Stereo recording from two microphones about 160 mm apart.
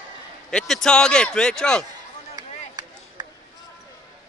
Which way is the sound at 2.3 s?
25° right (ahead or behind).